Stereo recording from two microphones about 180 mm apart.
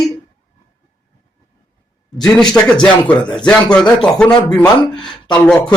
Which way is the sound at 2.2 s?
5° left (ahead or behind).